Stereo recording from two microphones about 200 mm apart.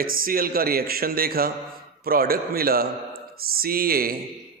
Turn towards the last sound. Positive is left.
turn(degrees=-45)  # may be behind; listen again after turning